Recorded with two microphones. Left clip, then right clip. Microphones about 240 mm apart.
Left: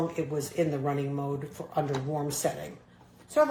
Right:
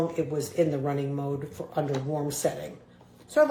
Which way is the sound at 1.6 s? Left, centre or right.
Left.